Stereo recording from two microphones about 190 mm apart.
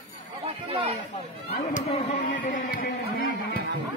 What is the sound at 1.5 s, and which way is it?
Chatter, 35° left (ahead or behind).